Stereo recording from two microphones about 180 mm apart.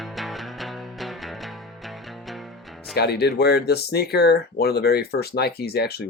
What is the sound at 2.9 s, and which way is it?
Speech, 65° left (ahead or behind).